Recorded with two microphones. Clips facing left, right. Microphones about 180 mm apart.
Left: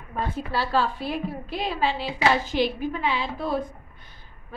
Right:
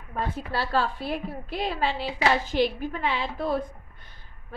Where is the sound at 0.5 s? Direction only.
55° right (ahead or behind).